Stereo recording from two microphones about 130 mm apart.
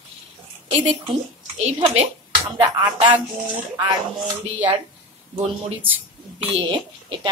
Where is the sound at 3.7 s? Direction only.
30° right (ahead or behind).